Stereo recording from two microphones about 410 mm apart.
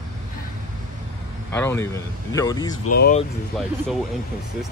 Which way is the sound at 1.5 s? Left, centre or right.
Centre.